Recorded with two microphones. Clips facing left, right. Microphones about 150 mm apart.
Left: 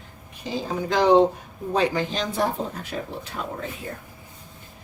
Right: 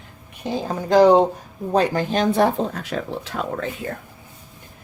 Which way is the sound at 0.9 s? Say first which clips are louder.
Right 4 dB; 40° right (ahead or behind).